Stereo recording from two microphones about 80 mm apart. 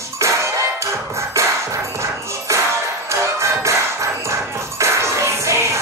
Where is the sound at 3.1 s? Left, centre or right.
Right.